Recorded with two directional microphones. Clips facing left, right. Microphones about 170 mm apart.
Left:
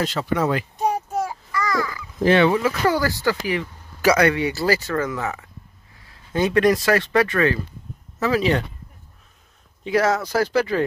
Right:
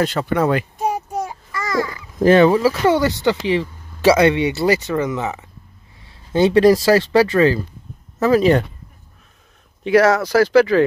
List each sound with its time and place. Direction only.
0.0 s a child's voice: 60° right (ahead or behind)
0.7 s child singing: 5° right (ahead or behind)
1.1 s babbling: 20° right (ahead or behind)
2.1 s speech: 45° right (ahead or behind)
2.9 s speech: 20° right (ahead or behind)
8.2 s speech: 45° right (ahead or behind)
9.8 s speech: 75° right (ahead or behind); by 10.8 s 90° right